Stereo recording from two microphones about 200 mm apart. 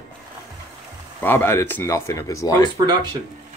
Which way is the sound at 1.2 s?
10° left (ahead or behind).